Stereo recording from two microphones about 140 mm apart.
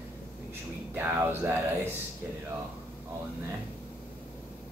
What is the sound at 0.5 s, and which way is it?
Speech, 15° right (ahead or behind).